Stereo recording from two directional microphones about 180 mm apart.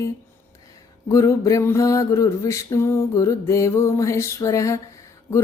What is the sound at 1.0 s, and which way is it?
Speech, 15° left (ahead or behind).